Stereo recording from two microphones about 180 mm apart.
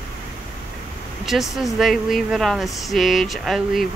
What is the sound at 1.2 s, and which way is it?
Speech, centre (ahead or behind).